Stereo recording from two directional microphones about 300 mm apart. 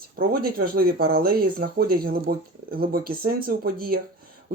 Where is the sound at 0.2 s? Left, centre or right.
Right.